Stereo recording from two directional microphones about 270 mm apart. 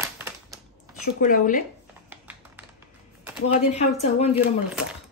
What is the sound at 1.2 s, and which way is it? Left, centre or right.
Speech, left.